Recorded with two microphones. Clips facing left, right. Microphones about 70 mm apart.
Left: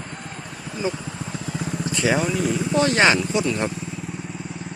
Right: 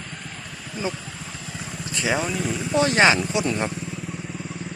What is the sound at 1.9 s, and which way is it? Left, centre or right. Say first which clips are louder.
Speech: left 3 dB; centre.